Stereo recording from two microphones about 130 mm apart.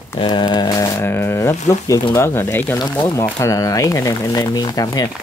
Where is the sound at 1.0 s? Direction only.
20° left (ahead or behind).